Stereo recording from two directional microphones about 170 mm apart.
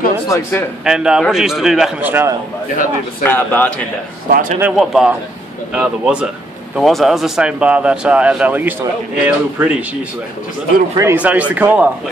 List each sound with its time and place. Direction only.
0.3 s a man's voice: 15° left (ahead or behind)
0.8 s speech: 5° right (ahead or behind)
3.3 s a man's voice: 10° left (ahead or behind)
4.3 s a man's voice: 55° right (ahead or behind)
4.6 s speech: 5° right (ahead or behind)
11.0 s speech: 10° right (ahead or behind)